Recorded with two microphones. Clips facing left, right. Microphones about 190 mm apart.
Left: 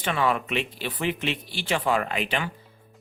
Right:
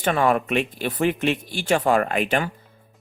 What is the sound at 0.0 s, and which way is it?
Speech, 45° right (ahead or behind).